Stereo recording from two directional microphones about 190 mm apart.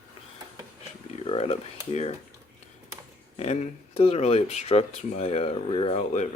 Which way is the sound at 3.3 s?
35° left (ahead or behind).